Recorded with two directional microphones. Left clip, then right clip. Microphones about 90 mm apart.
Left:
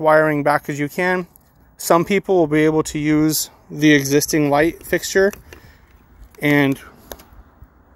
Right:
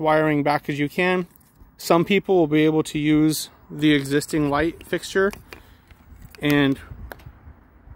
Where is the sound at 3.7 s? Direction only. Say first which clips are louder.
Left 5 dB; 40° left (ahead or behind).